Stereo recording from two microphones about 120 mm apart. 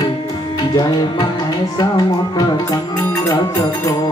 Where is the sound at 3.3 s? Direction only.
35° left (ahead or behind).